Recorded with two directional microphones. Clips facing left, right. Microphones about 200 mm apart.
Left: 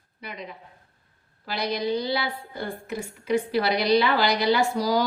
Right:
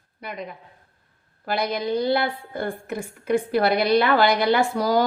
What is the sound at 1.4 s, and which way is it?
A woman's voice, 55° right (ahead or behind).